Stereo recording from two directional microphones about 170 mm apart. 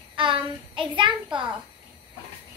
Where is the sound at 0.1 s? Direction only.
30° right (ahead or behind).